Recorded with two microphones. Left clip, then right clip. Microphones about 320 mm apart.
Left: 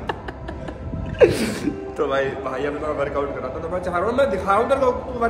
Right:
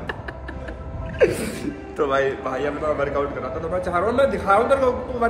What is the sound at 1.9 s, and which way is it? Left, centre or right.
A man's voice, centre.